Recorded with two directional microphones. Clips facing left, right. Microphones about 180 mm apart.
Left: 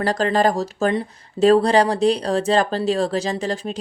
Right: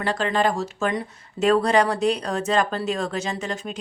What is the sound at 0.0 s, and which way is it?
A woman's voice, 40° left (ahead or behind).